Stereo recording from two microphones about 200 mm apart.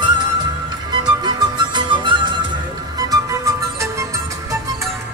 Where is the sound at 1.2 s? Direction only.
20° right (ahead or behind).